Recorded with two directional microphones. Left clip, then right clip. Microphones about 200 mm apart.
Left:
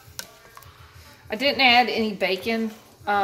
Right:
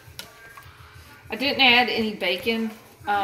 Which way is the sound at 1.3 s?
30° left (ahead or behind).